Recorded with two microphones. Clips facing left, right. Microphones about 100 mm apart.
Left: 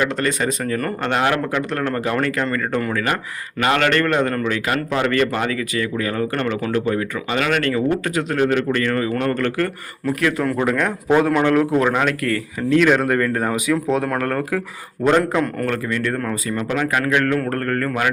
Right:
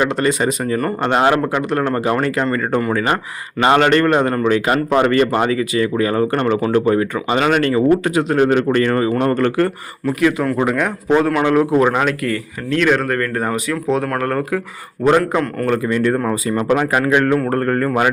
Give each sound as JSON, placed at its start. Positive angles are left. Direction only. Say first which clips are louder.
{"t": 0.0, "sound": "speech", "louder": "right 4 dB", "side_deg": -20}
{"t": 1.0, "sound": "speech", "louder": "right 5 dB", "side_deg": -25}
{"t": 8.4, "sound": "a man's voice", "louder": "right 4 dB", "side_deg": -30}
{"t": 10.2, "sound": "speech", "louder": "right 4 dB", "side_deg": -10}
{"t": 15.9, "sound": "speech", "louder": "right 6 dB", "side_deg": -25}